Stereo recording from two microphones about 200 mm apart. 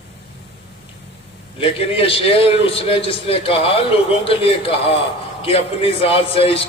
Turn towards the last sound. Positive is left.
turn(degrees=30)  # may be behind; listen again after turning